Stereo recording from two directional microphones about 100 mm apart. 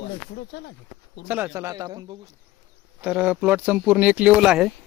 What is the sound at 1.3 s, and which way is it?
Speech, 20° right (ahead or behind).